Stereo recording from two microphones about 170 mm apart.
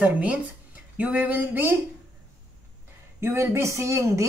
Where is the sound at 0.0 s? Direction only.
5° right (ahead or behind).